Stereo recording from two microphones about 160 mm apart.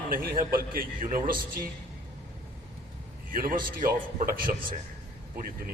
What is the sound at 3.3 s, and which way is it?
A man's voice, 60° right (ahead or behind).